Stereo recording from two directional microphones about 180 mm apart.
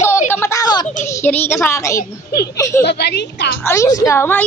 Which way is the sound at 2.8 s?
65° left (ahead or behind).